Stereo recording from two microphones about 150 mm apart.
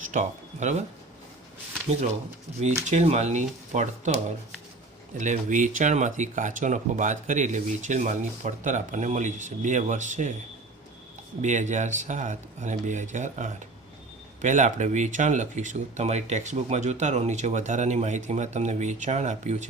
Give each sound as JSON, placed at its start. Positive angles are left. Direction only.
{"t": 0.0, "sound": "speech", "side_deg": -55}
{"t": 2.8, "sound": "speech", "side_deg": -45}
{"t": 11.4, "sound": "speech", "side_deg": -55}